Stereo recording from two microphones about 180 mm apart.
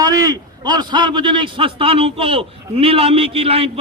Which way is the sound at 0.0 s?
20° right (ahead or behind).